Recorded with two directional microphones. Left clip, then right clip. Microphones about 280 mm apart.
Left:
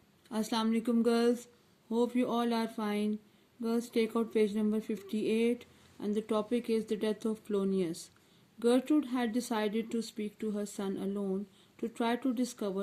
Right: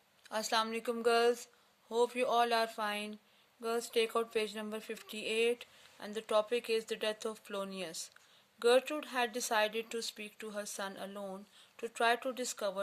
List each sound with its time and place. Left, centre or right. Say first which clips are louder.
0.3 s speech: even; right